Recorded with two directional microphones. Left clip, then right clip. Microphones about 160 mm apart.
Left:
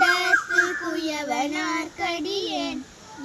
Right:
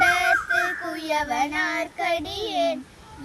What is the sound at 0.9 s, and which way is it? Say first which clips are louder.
Child singing: right 2 dB; 25° right (ahead or behind).